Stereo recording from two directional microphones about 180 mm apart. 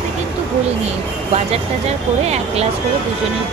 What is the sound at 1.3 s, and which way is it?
Speech, 35° right (ahead or behind).